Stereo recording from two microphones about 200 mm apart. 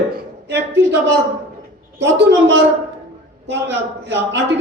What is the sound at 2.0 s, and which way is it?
A man's voice, 65° right (ahead or behind).